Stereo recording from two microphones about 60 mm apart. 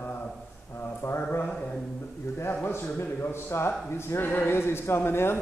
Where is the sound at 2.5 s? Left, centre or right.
Left.